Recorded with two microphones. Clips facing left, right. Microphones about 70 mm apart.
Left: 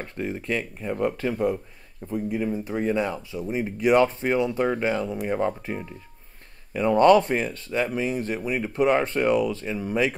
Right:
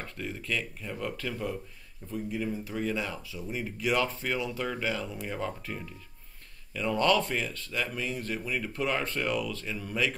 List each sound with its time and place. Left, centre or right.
0.0 s speech: left
8.2 s speech: left